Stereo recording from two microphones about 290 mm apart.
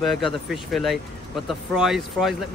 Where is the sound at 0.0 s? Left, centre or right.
Centre.